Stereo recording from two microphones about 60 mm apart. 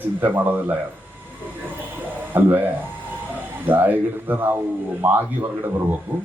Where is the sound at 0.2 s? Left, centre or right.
Right.